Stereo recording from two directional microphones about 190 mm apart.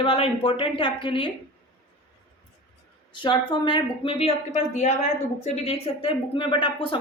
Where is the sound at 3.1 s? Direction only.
25° left (ahead or behind).